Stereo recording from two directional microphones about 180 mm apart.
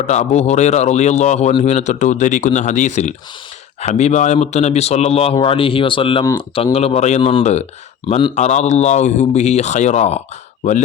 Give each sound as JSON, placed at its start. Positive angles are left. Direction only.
{"t": 0.0, "sound": "speech", "side_deg": 40}